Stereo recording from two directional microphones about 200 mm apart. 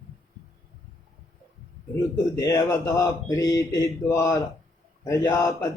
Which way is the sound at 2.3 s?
15° left (ahead or behind).